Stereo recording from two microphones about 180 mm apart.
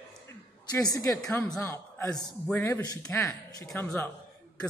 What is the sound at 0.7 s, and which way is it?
A woman's voice, 20° left (ahead or behind).